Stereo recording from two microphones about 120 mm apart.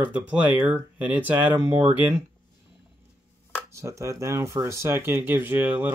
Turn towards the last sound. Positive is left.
turn(degrees=-15)  # may be behind; listen again after turning